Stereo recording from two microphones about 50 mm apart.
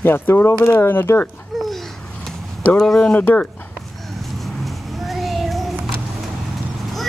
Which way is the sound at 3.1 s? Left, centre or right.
Left.